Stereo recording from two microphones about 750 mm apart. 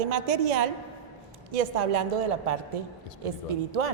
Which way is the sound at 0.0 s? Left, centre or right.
Right.